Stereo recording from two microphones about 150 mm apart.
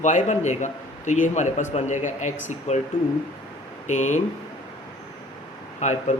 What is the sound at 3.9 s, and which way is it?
Speech, 50° left (ahead or behind).